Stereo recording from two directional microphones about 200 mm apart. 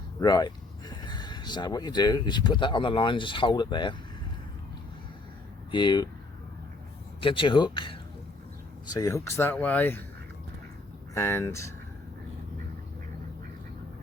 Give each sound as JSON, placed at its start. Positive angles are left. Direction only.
{"t": 0.2, "sound": "speech", "side_deg": 20}
{"t": 5.7, "sound": "speech", "side_deg": 20}
{"t": 7.2, "sound": "speech", "side_deg": 25}
{"t": 11.1, "sound": "speech", "side_deg": 15}